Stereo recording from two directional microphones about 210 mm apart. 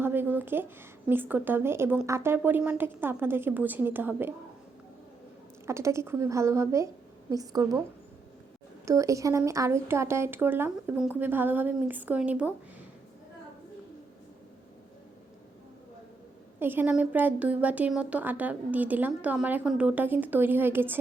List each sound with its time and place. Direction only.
0.0 s a woman's voice: 10° right (ahead or behind)
5.6 s a woman's voice: 15° right (ahead or behind)
8.8 s a woman's voice: 15° right (ahead or behind)
16.6 s a woman's voice: 10° right (ahead or behind)